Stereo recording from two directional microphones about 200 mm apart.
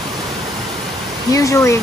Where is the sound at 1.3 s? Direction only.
15° left (ahead or behind).